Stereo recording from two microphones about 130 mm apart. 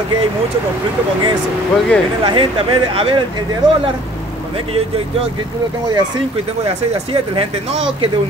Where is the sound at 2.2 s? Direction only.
40° right (ahead or behind).